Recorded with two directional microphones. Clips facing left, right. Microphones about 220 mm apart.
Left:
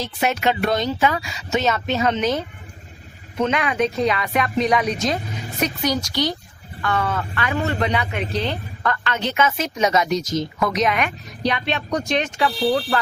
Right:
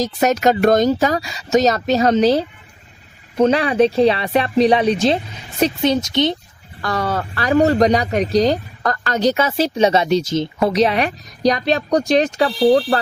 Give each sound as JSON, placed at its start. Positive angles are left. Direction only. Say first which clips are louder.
{"t": 0.0, "sound": "speech", "louder": "right 6 dB", "side_deg": -40}
{"t": 6.8, "sound": "speech", "louder": "right 2 dB", "side_deg": -35}